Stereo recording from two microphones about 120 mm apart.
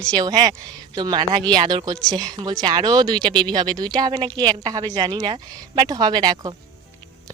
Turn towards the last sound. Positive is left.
turn(degrees=-40)  # may be behind; listen again after turning